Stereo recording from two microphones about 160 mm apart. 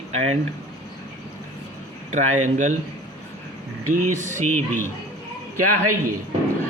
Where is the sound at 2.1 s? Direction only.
50° right (ahead or behind).